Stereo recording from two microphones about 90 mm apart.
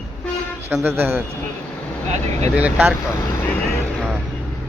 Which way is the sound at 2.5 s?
15° right (ahead or behind).